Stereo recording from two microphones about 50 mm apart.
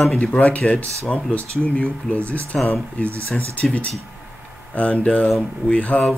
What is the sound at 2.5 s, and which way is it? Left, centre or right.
Speech, centre.